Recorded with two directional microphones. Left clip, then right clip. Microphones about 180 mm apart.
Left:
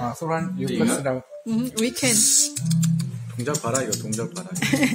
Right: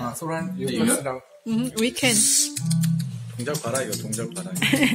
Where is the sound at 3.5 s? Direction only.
55° left (ahead or behind).